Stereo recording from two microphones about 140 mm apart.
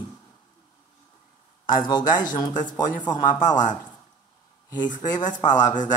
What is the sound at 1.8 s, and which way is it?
A man's voice, 35° left (ahead or behind).